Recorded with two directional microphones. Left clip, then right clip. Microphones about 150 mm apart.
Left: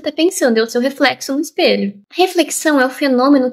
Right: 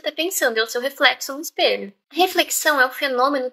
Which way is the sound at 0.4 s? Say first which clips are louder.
Left 6 dB; 15° left (ahead or behind).